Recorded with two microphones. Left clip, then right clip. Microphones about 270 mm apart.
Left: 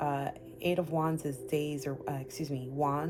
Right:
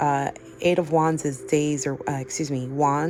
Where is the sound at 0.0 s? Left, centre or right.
Right.